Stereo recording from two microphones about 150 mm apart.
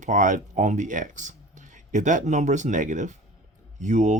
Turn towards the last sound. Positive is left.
turn(degrees=-55)  # may be behind; listen again after turning